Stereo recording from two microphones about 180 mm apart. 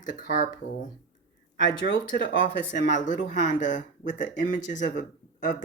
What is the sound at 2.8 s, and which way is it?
Speech, 45° left (ahead or behind).